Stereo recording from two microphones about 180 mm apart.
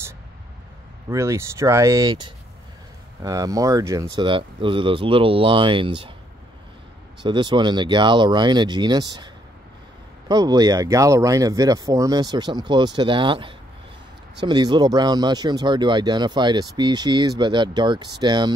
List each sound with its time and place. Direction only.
1.1 s speech: 15° right (ahead or behind)
7.2 s speech: 25° right (ahead or behind)